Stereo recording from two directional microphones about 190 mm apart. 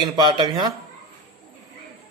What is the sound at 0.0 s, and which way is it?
Speech, 25° right (ahead or behind).